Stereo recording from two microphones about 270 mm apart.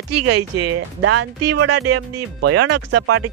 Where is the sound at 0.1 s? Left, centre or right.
Right.